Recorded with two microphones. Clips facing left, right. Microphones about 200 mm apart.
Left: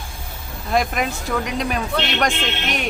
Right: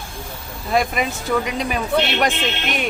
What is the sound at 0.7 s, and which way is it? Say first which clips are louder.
Speech: right 1 dB; centre (ahead or behind).